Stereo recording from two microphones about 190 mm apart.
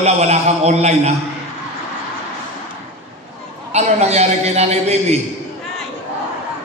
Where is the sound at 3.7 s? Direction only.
35° right (ahead or behind).